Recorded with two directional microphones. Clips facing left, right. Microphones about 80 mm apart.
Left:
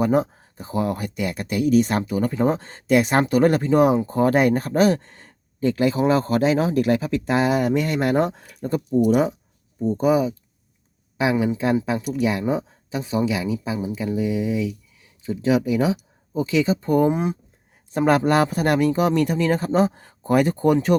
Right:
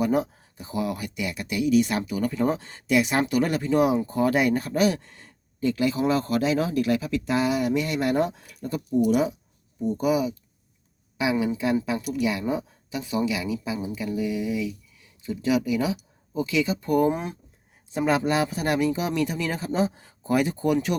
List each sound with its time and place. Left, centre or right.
0.0 s speech: left
17.9 s speech: left